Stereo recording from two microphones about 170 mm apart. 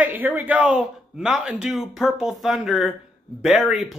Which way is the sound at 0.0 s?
10° right (ahead or behind).